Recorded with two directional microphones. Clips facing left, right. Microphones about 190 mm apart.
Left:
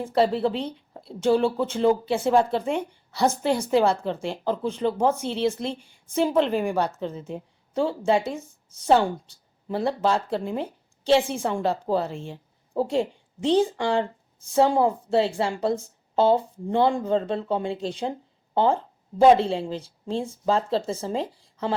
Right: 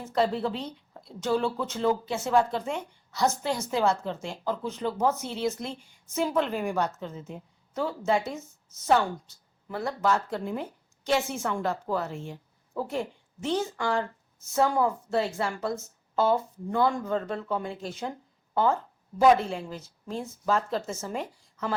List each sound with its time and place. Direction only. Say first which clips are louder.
0.0 s a woman's voice: left 5 dB; 30° left (ahead or behind)